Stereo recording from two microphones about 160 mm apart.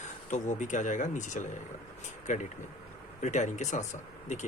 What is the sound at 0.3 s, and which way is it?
Speech, 50° left (ahead or behind).